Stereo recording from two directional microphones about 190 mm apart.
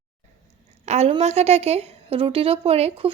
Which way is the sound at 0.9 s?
35° right (ahead or behind).